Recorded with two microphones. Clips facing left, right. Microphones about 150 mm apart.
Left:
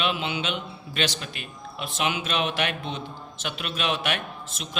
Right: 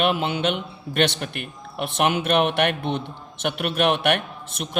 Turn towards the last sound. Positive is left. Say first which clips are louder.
# right 5 dB
turn(degrees=-60)  # may be behind; listen again after turning